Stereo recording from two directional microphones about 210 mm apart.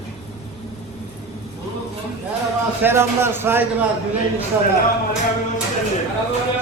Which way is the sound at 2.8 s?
10° right (ahead or behind).